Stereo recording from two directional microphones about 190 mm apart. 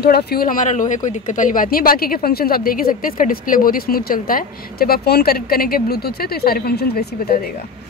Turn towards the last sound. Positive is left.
turn(degrees=55)  # may be behind; listen again after turning